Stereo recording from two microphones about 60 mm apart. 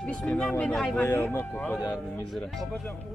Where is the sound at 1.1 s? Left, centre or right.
Left.